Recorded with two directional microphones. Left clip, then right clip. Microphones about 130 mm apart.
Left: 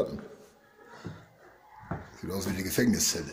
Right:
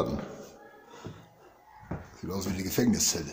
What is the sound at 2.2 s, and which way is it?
Speech, 10° right (ahead or behind).